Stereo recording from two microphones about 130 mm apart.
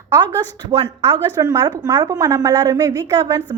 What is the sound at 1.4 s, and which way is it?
A woman's voice, 30° right (ahead or behind).